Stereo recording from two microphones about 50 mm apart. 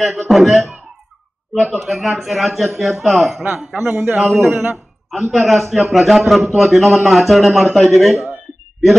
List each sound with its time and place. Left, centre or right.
0.0 s a man's voice: centre
3.8 s a man's voice: right
4.2 s a man's voice: centre